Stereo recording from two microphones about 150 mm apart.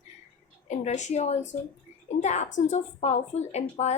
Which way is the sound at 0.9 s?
50° left (ahead or behind).